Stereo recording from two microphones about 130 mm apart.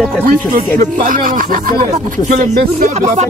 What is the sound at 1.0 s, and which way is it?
Speech, 90° right.